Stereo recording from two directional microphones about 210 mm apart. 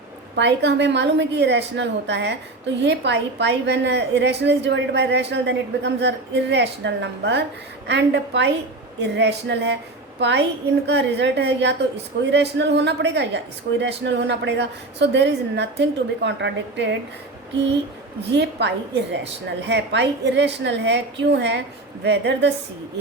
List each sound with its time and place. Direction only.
0.3 s a woman's voice: 55° right (ahead or behind)
18.3 s a woman's voice: 55° right (ahead or behind)